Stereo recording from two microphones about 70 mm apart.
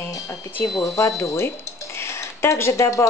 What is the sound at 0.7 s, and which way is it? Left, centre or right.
Speech, left.